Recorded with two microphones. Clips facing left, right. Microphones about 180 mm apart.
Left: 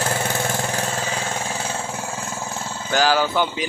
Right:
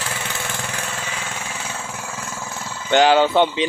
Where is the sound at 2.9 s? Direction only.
25° right (ahead or behind).